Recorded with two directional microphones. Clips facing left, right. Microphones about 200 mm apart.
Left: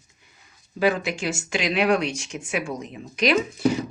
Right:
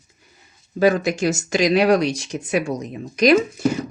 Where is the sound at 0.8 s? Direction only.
45° right (ahead or behind).